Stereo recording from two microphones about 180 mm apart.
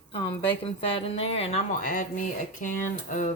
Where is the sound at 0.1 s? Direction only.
30° left (ahead or behind).